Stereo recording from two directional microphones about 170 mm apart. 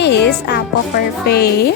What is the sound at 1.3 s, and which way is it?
Speech, 70° left (ahead or behind).